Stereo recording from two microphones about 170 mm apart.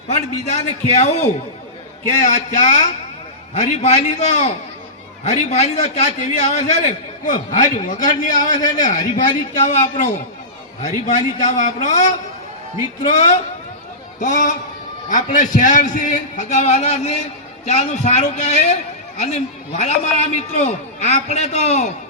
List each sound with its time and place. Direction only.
0.1 s a man's voice: 40° left (ahead or behind)